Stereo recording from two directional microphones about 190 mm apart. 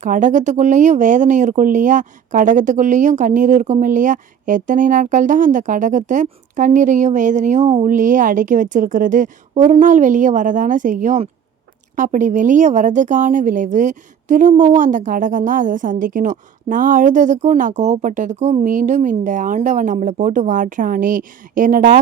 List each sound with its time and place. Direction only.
0.0 s speech: 40° right (ahead or behind)